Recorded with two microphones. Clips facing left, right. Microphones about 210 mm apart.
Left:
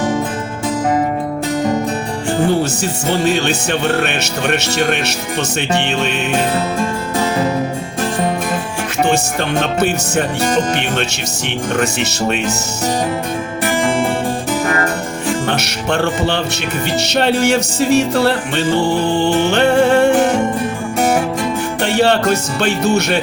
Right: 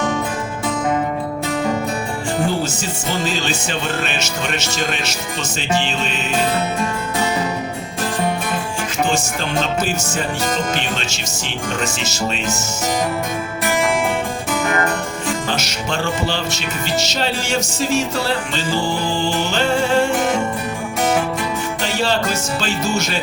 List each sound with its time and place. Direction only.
3.1 s music: 65° left (ahead or behind)
9.6 s music: 65° left (ahead or behind)
15.4 s music: 65° left (ahead or behind)
21.8 s music: 65° left (ahead or behind)